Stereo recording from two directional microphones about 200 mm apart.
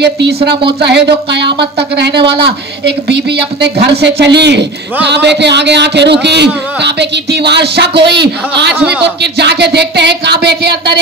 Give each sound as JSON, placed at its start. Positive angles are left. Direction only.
{"t": 0.0, "sound": "a man's voice", "side_deg": -55}